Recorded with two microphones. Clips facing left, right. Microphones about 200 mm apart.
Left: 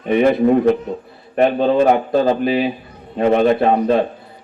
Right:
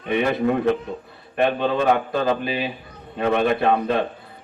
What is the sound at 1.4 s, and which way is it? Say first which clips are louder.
A man's voice: left 6 dB; 35° left (ahead or behind).